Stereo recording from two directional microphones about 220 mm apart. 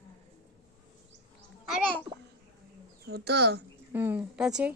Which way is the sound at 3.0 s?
45° right (ahead or behind).